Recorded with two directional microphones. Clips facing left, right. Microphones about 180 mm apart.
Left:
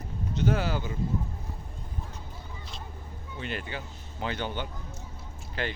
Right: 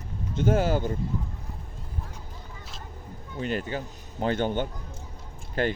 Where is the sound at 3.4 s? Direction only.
40° right (ahead or behind).